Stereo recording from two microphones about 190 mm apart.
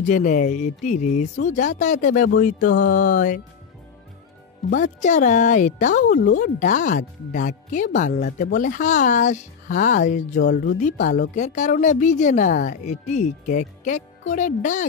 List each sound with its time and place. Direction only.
0.0 s a woman's voice: 40° left (ahead or behind)
4.6 s a woman's voice: 45° left (ahead or behind)
10.4 s speech: 60° left (ahead or behind)
10.8 s a woman's voice: 40° left (ahead or behind)